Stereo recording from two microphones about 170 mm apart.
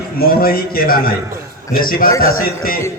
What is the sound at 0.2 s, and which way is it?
A man's voice, 60° left (ahead or behind).